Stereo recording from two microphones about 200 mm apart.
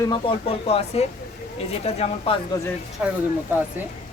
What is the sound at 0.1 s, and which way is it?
Speech, 30° left (ahead or behind).